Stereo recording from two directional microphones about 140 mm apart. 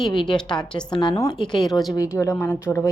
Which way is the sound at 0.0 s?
35° left (ahead or behind).